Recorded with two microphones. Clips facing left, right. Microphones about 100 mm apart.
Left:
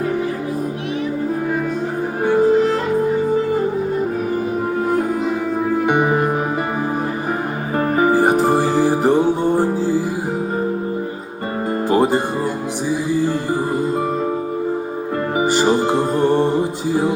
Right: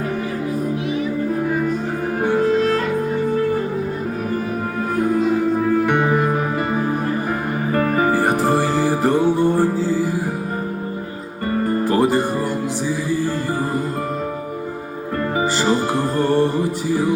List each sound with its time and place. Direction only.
2.5 s music: 15° left (ahead or behind)
5.8 s music: 15° left (ahead or behind)
7.8 s music: 20° left (ahead or behind)
11.7 s music: 20° left (ahead or behind)
15.4 s music: 15° left (ahead or behind)